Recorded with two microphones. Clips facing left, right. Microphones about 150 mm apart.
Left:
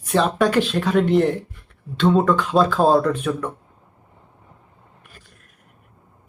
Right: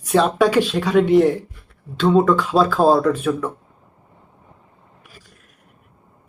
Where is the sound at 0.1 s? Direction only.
5° right (ahead or behind).